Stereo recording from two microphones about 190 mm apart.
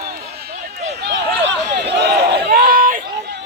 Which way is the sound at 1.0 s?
65° right (ahead or behind).